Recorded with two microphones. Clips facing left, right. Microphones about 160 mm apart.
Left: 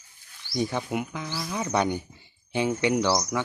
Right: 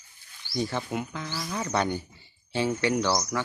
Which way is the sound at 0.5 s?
15° left (ahead or behind).